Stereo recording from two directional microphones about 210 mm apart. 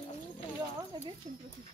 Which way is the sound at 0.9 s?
20° right (ahead or behind).